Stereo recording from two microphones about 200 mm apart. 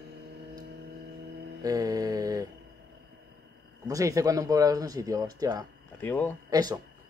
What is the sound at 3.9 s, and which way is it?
Speech, 15° right (ahead or behind).